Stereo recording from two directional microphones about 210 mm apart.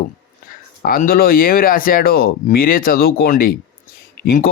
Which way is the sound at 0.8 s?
45° left (ahead or behind).